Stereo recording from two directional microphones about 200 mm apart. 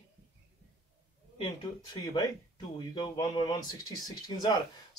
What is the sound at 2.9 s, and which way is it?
Speech, 20° left (ahead or behind).